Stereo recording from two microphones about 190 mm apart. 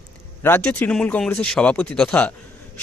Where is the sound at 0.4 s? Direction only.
10° left (ahead or behind).